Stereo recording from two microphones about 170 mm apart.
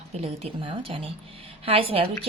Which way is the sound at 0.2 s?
35° right (ahead or behind).